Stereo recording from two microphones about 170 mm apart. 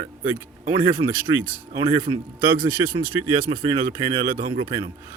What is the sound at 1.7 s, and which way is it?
Speech, 25° right (ahead or behind).